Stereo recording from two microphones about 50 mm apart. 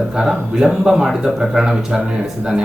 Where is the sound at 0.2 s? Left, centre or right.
Centre.